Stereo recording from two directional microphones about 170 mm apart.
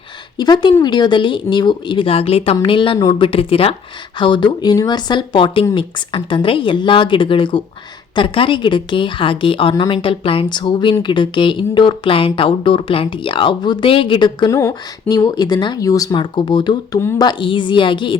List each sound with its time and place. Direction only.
0.3 s speech: 25° left (ahead or behind)